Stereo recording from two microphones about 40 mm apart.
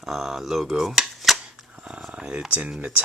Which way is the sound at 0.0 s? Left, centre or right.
Centre.